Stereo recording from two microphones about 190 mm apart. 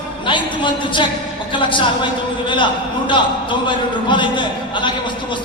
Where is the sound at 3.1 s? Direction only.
25° left (ahead or behind).